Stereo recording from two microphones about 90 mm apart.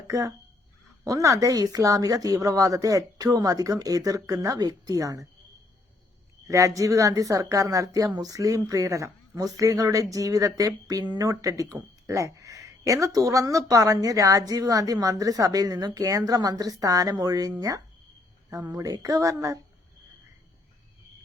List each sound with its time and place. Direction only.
0.1 s speech: 35° right (ahead or behind)
6.5 s speech: 35° right (ahead or behind)